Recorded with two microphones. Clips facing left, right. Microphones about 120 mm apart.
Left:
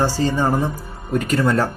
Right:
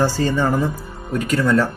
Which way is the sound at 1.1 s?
30° left (ahead or behind).